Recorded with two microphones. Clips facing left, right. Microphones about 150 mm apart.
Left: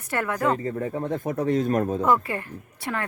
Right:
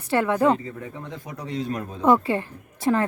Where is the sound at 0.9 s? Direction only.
50° left (ahead or behind).